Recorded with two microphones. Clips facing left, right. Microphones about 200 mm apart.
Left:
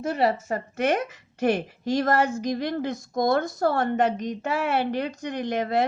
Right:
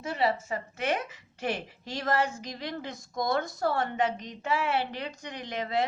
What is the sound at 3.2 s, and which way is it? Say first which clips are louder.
A woman's voice: left 6 dB; 60° left (ahead or behind).